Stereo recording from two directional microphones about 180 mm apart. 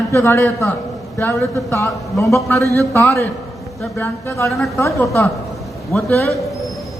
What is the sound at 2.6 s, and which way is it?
Speech, 15° right (ahead or behind).